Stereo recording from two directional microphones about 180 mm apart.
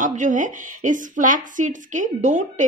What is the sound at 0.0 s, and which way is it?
A woman's voice, 45° right (ahead or behind).